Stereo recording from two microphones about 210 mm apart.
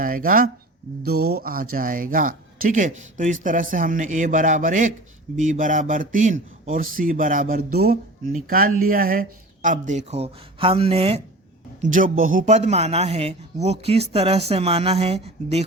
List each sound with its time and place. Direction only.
0.0 s speech: 40° right (ahead or behind)
1.1 s speech: 90° right
1.4 s a man's voice: 45° right (ahead or behind); by 11.2 s 30° right (ahead or behind)
11.8 s a man's voice: 40° right (ahead or behind)